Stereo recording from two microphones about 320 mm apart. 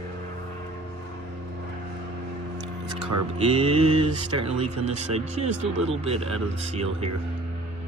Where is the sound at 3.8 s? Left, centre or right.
Right.